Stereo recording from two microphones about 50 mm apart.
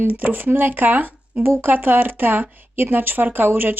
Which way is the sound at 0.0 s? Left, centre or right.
Right.